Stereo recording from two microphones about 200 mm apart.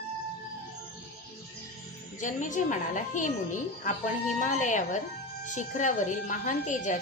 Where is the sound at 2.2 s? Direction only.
40° left (ahead or behind).